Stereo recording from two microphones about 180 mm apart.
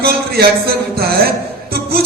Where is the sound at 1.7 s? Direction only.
60° right (ahead or behind).